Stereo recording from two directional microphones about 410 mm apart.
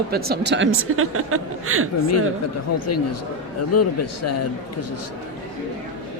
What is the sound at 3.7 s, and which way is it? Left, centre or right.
Speech, left.